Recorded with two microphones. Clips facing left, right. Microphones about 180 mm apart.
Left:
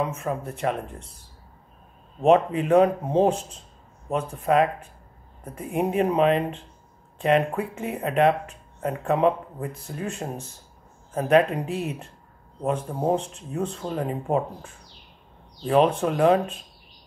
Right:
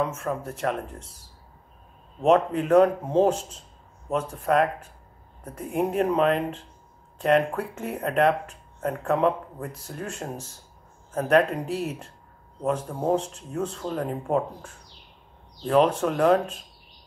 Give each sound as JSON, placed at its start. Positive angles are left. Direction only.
{"t": 0.2, "sound": "speech", "side_deg": 0}
{"t": 2.2, "sound": "speech", "side_deg": 5}
{"t": 12.6, "sound": "speech", "side_deg": 10}